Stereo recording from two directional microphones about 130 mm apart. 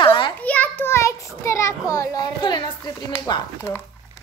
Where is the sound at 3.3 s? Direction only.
35° left (ahead or behind).